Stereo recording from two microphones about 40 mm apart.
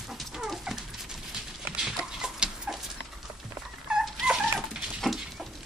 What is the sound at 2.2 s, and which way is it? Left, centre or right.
Chicken, centre.